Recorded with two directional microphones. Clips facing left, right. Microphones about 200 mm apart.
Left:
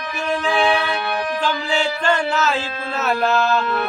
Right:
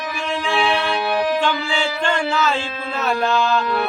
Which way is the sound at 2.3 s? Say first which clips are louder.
Even; 5° left (ahead or behind).